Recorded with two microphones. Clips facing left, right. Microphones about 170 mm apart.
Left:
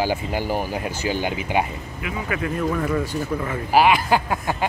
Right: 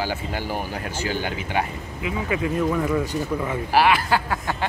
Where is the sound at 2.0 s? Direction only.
25° right (ahead or behind).